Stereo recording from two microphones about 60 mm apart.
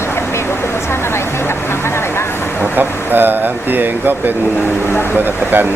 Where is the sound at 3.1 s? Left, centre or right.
Right.